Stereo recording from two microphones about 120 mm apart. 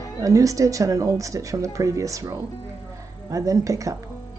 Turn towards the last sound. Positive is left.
turn(degrees=-25)  # may be behind; listen again after turning